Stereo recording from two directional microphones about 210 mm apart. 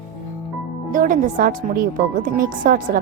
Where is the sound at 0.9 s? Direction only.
40° right (ahead or behind).